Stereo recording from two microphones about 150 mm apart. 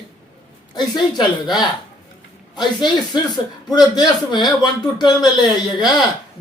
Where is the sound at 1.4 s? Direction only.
Centre (ahead or behind).